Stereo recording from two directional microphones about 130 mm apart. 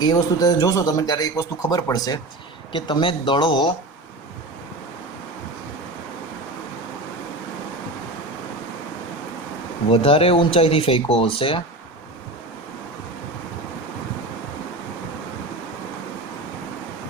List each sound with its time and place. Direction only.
0.0 s a man's voice: 30° left (ahead or behind)
9.9 s speech: 45° left (ahead or behind)